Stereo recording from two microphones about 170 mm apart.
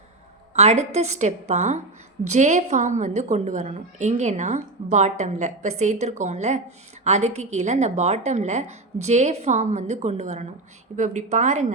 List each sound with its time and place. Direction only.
0.5 s a woman's voice: 40° right (ahead or behind)